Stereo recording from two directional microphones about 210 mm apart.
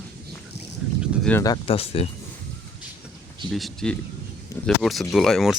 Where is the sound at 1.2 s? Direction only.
10° left (ahead or behind); by 2.0 s 25° left (ahead or behind).